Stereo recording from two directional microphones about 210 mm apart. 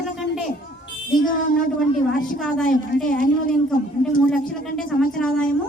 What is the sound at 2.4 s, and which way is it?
Speech, centre (ahead or behind).